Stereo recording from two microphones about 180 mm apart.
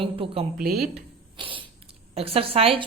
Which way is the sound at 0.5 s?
55° right (ahead or behind).